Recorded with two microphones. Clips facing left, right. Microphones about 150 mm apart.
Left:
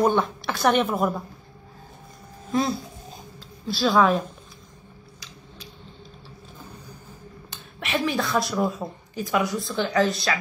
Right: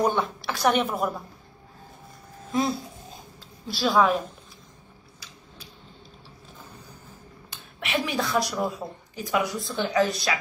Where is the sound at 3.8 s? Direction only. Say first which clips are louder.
Left 2 dB; centre (ahead or behind).